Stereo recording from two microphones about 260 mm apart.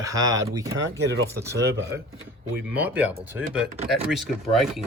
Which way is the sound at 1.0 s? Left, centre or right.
Right.